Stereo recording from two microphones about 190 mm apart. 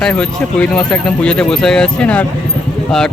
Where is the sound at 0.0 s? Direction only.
5° left (ahead or behind).